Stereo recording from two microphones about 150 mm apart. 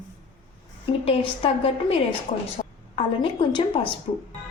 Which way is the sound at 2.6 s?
50° left (ahead or behind).